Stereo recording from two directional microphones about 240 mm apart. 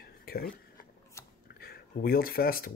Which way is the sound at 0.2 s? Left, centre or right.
Left.